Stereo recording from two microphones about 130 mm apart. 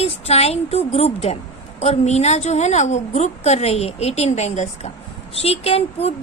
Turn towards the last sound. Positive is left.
turn(degrees=50)  # may be behind; listen again after turning